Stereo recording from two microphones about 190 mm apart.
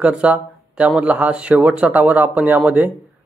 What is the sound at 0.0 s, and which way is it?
Speech, 5° right (ahead or behind).